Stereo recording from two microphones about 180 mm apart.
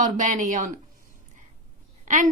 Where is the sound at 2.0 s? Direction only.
45° right (ahead or behind).